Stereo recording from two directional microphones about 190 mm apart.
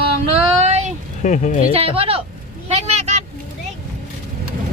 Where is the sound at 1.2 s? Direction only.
40° left (ahead or behind).